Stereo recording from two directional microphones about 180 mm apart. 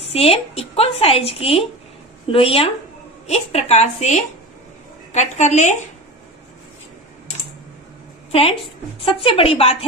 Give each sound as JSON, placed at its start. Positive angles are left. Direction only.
{"t": 0.0, "sound": "a woman's voice", "side_deg": 35}
{"t": 8.3, "sound": "a woman's voice", "side_deg": 30}